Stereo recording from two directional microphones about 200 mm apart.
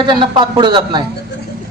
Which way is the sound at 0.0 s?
25° right (ahead or behind).